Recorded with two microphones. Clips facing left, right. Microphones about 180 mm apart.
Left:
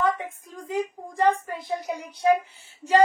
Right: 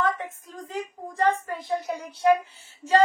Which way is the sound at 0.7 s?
10° left (ahead or behind).